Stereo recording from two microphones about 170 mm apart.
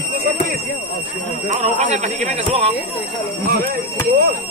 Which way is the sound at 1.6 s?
45° right (ahead or behind).